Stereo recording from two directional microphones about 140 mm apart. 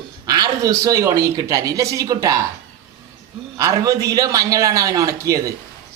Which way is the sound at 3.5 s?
25° right (ahead or behind).